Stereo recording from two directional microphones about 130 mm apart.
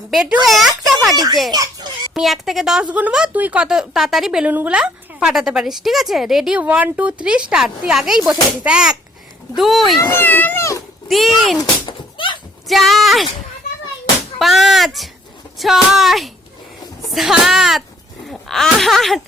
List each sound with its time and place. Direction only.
0.1 s a woman's voice: 5° right (ahead or behind)
1.5 s speech: 30° right (ahead or behind)
2.1 s a woman's voice: centre (ahead or behind)
10.0 s a child's voice: 20° left (ahead or behind)
11.1 s a woman's voice: centre (ahead or behind)
11.9 s a sound: 40° left (ahead or behind)
12.6 s a woman's voice: centre (ahead or behind)
14.3 s a woman's voice: centre (ahead or behind)